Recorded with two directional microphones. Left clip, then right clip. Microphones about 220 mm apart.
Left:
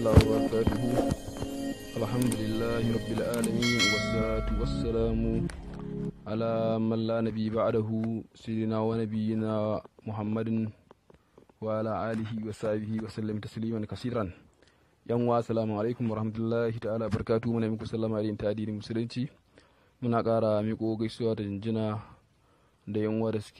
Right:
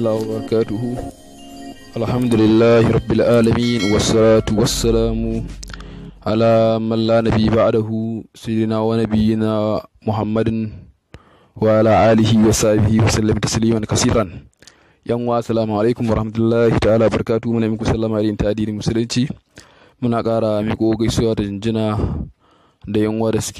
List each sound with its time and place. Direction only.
0.0 s speech: 45° right (ahead or behind)
2.0 s speech: 50° right (ahead or behind)
3.6 s speech: centre (ahead or behind)
4.3 s speech: 50° right (ahead or behind)